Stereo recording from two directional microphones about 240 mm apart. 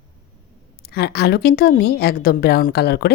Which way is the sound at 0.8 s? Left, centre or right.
Left.